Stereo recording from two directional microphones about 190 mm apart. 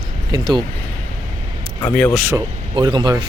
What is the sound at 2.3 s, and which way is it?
Speech, 20° right (ahead or behind).